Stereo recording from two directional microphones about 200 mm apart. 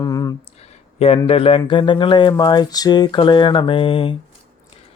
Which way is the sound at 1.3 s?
30° left (ahead or behind).